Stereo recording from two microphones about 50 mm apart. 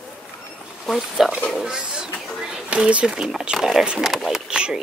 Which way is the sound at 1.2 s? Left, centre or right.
Centre.